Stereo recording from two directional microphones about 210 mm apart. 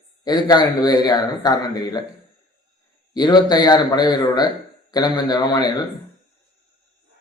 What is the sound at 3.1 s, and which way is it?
A man's voice, 20° left (ahead or behind).